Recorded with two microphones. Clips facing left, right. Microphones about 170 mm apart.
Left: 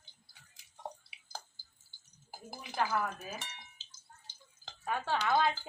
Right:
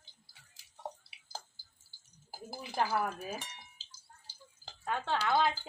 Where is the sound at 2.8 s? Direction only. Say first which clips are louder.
Right 1 dB; 30° right (ahead or behind).